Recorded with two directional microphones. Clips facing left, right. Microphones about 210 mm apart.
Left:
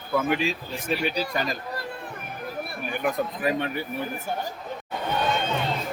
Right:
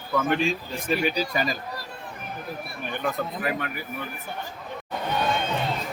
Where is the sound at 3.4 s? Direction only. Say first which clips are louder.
Left 6 dB; 25° left (ahead or behind).